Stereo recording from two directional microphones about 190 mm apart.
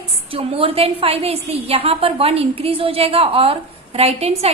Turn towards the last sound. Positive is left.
turn(degrees=-35)  # may be behind; listen again after turning